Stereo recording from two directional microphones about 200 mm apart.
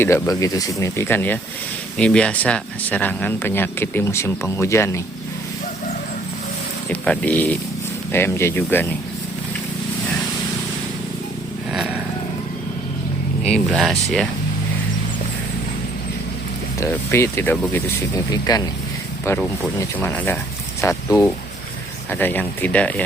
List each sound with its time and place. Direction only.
0.0 s speech: 15° left (ahead or behind)
6.9 s speech: 5° left (ahead or behind)
11.7 s a sound: 5° right (ahead or behind)
13.4 s speech: 5° left (ahead or behind)
16.8 s speech: 10° left (ahead or behind)
18.5 s speech: 20° left (ahead or behind)